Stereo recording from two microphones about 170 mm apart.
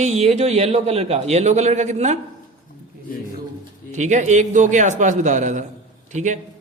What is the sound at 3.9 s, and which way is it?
Speech, 45° right (ahead or behind).